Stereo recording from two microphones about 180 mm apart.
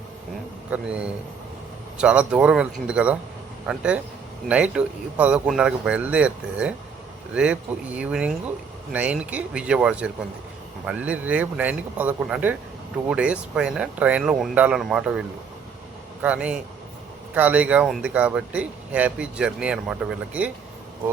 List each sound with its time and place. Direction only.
0.7 s speech: 5° right (ahead or behind)
16.2 s speech: 5° right (ahead or behind)